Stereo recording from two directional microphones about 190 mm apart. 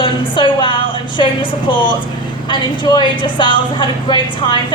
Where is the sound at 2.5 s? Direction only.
25° left (ahead or behind).